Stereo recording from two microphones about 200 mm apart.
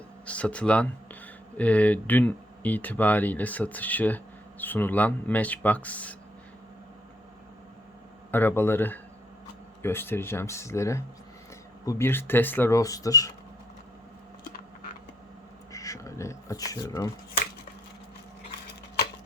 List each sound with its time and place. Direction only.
0.3 s speech: 5° left (ahead or behind)
8.3 s speech: 10° left (ahead or behind)
15.7 s a sound: 15° left (ahead or behind)